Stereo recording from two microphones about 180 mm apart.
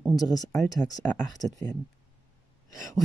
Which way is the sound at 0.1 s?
20° left (ahead or behind).